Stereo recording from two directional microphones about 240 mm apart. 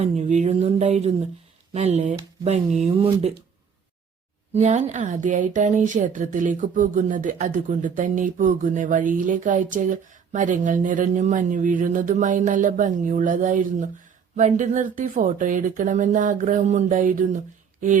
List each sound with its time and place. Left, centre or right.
0.0 s speech: right
4.5 s speech: right